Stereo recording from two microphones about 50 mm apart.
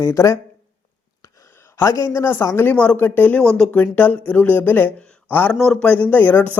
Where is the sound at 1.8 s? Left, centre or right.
Left.